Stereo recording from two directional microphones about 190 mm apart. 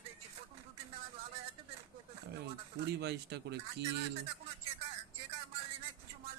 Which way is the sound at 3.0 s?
60° right (ahead or behind).